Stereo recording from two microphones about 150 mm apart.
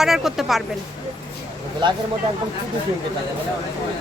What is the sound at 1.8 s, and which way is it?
Speech, 30° right (ahead or behind).